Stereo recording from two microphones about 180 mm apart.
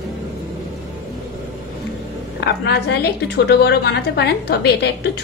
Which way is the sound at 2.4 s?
70° left (ahead or behind).